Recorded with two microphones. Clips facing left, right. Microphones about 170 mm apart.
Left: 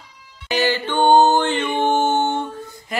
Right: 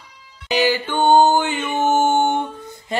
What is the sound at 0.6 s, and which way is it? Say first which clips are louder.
Music: even; 10° right (ahead or behind).